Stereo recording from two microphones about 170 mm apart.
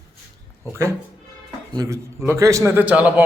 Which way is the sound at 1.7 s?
20° right (ahead or behind).